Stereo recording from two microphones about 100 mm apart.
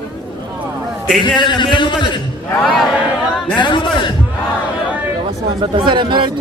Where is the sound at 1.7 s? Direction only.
50° left (ahead or behind).